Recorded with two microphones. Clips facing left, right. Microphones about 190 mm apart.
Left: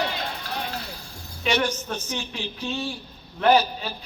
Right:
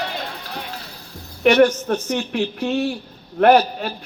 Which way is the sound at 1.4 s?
60° right (ahead or behind).